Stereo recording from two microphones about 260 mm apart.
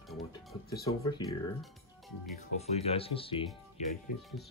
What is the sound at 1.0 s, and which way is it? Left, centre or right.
Speech, centre.